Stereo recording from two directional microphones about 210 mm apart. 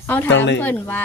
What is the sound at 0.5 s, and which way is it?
Speech, 10° left (ahead or behind).